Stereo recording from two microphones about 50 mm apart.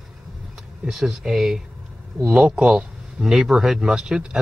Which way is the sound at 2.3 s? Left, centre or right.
Right.